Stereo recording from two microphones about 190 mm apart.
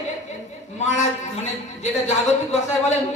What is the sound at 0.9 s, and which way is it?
Speech, 40° left (ahead or behind).